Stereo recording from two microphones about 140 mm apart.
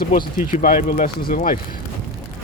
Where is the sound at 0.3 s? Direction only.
70° left (ahead or behind); by 1.5 s 85° left.